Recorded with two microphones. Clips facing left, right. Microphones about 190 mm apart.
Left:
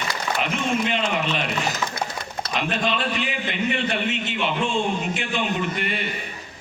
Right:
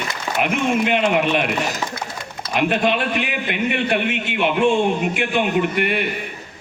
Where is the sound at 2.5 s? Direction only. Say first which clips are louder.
Right 6 dB; 55° right (ahead or behind).